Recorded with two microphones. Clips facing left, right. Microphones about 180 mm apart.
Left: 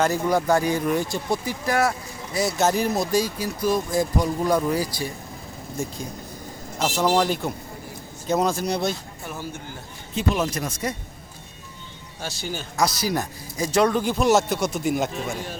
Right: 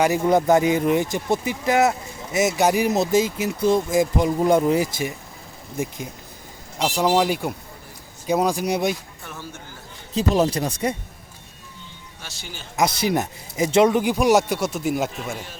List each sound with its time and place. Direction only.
0.0 s speech: 20° right (ahead or behind)
9.2 s speech: 10° left (ahead or behind)
10.2 s speech: 35° right (ahead or behind)
12.2 s speech: 40° left (ahead or behind)
13.0 s speech: 20° right (ahead or behind); by 15.4 s 5° right (ahead or behind)